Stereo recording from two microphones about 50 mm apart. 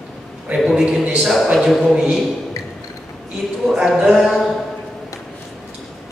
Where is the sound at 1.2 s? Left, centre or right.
Centre.